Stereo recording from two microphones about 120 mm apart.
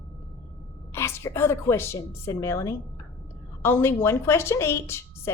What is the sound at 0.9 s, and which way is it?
A woman's voice, 20° left (ahead or behind).